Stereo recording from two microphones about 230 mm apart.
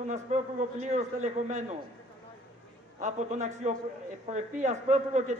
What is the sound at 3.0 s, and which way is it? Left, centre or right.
A man's voice, right.